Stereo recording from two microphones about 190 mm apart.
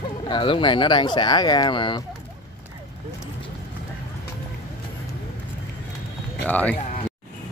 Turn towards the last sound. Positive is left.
turn(degrees=10)  # may be behind; listen again after turning